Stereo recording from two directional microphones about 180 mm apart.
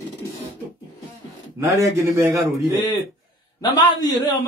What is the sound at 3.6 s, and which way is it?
Speech, 25° left (ahead or behind).